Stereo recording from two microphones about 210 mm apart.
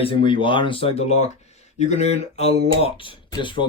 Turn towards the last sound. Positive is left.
turn(degrees=25)  # may be behind; listen again after turning